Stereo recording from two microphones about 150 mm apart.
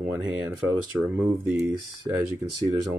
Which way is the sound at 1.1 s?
5° right (ahead or behind).